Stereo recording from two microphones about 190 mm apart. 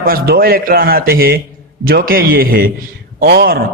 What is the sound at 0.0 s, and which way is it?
A man's voice, 55° right (ahead or behind).